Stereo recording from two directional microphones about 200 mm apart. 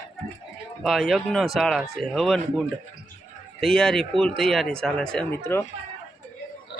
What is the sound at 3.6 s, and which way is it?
Speech, 5° left (ahead or behind).